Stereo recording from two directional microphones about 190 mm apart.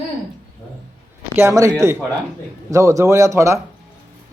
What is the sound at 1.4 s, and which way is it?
Speech, 15° right (ahead or behind).